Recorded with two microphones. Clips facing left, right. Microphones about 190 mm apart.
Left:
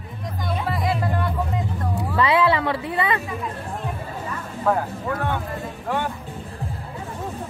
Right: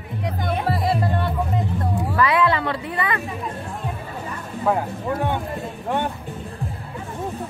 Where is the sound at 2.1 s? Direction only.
25° left (ahead or behind).